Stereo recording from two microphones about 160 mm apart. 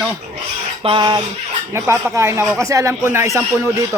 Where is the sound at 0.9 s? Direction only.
30° right (ahead or behind).